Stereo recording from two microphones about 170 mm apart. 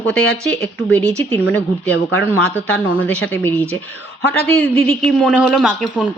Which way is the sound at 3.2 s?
10° left (ahead or behind).